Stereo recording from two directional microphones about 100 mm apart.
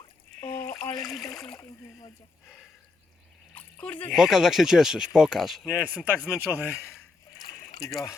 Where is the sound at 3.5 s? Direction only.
15° left (ahead or behind).